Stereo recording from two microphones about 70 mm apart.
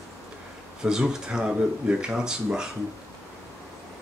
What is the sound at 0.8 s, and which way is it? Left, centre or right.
Speech, centre.